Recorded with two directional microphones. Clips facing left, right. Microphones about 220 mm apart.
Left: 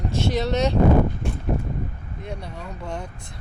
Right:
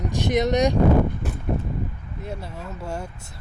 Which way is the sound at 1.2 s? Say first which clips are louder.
Left 2 dB; 5° right (ahead or behind).